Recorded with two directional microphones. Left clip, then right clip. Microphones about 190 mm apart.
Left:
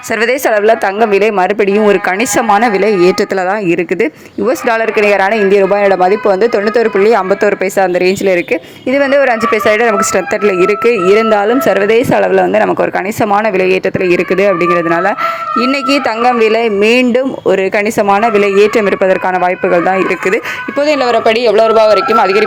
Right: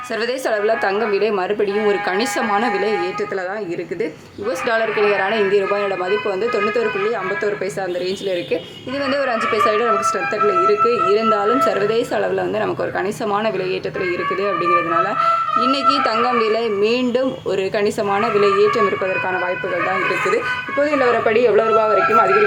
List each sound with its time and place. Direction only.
0.3 s speech: 40° left (ahead or behind)
4.4 s speech: 45° left (ahead or behind)
15.9 s speech: 40° left (ahead or behind)
20.7 s speech: 30° left (ahead or behind)